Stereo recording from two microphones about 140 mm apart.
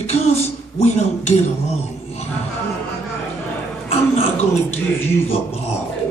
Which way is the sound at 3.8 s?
45° left (ahead or behind).